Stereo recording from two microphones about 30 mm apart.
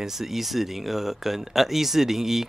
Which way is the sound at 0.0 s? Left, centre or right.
Centre.